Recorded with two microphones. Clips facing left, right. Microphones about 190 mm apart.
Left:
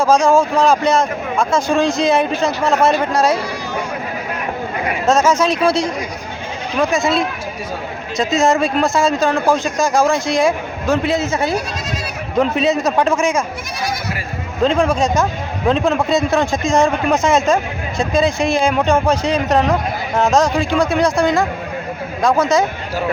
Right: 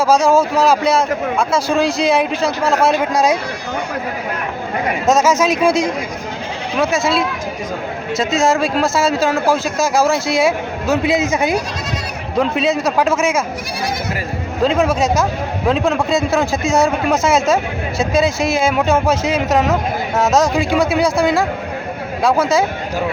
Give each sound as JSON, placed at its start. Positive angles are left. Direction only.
{"t": 0.0, "sound": "a man's voice", "side_deg": -5}
{"t": 5.0, "sound": "a man's voice", "side_deg": -5}
{"t": 14.6, "sound": "a man's voice", "side_deg": -5}